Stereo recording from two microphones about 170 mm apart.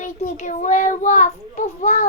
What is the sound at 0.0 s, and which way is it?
A child's voice, 45° left (ahead or behind).